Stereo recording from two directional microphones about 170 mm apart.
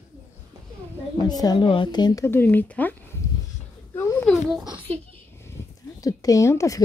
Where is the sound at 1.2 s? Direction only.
25° left (ahead or behind).